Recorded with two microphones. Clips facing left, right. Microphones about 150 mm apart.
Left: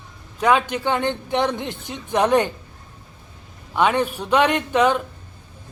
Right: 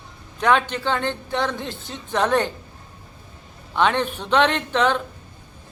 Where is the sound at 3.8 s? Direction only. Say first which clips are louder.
Left 1 dB; 10° left (ahead or behind).